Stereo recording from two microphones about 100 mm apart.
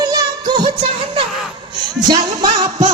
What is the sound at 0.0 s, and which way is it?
Music, 45° right (ahead or behind).